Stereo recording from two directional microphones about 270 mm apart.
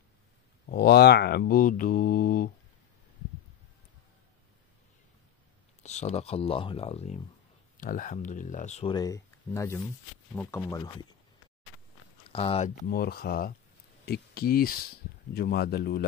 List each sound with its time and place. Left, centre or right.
0.7 s mantra: left
5.8 s speech: left
12.3 s mantra: left
14.0 s speech: left
15.3 s mantra: left